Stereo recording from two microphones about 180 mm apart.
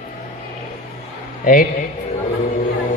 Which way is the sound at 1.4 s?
50° left (ahead or behind).